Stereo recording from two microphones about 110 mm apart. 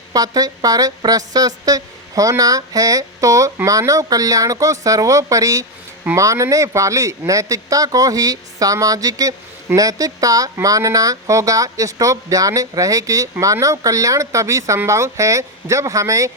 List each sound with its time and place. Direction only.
0.1 s a woman's voice: 35° right (ahead or behind)